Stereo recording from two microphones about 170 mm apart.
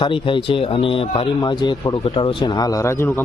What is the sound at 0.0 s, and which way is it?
A man's voice, 30° left (ahead or behind).